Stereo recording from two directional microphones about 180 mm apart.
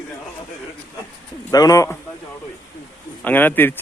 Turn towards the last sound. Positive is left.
turn(degrees=10)  # may be behind; listen again after turning